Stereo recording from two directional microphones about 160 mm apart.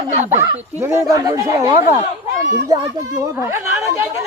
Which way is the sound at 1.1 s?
20° right (ahead or behind).